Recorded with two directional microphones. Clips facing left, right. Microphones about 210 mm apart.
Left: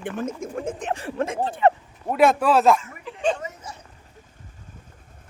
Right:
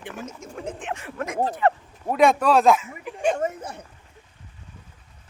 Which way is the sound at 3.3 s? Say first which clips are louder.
Right 8 dB; 55° right (ahead or behind).